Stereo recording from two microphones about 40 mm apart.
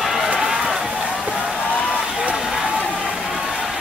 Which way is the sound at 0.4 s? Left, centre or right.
Centre.